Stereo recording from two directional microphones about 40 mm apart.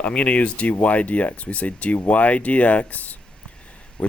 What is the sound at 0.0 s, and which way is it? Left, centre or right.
Speech, left.